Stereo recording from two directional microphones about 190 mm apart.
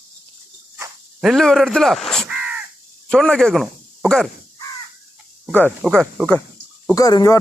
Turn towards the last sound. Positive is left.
turn(degrees=20)  # may be behind; listen again after turning